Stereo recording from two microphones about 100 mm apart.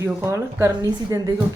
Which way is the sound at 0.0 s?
30° right (ahead or behind).